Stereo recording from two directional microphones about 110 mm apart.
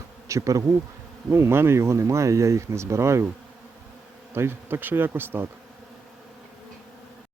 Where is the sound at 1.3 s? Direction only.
20° right (ahead or behind).